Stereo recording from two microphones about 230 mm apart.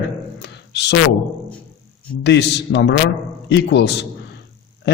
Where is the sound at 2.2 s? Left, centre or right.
Left.